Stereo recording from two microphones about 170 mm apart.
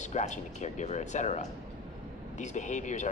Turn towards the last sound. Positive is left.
turn(degrees=45)  # may be behind; listen again after turning